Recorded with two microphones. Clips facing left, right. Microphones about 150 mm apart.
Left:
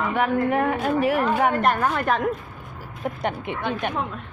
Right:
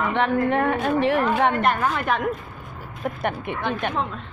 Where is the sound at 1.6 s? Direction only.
45° left (ahead or behind).